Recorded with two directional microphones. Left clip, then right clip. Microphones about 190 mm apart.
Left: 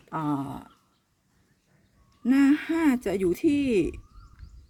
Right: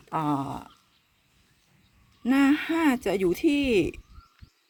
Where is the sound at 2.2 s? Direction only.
15° left (ahead or behind).